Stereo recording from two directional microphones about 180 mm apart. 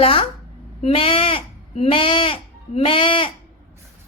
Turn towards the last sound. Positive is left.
turn(degrees=30)  # may be behind; listen again after turning